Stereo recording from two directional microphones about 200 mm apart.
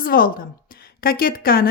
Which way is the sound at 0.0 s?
45° left (ahead or behind).